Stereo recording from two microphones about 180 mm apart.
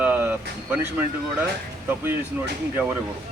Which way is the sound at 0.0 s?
10° right (ahead or behind).